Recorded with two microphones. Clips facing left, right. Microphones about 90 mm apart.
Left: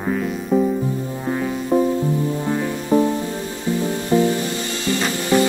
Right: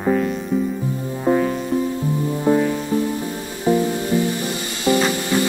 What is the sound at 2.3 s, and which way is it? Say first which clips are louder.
Music: right 5 dB; 15° right (ahead or behind).